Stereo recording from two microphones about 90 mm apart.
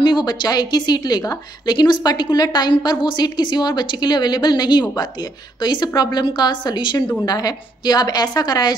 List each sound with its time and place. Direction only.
0.0 s a woman's voice: 55° left (ahead or behind)
7.2 s a woman's voice: 45° left (ahead or behind)